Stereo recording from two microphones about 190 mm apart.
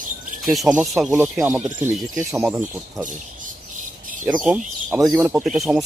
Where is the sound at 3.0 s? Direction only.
45° right (ahead or behind).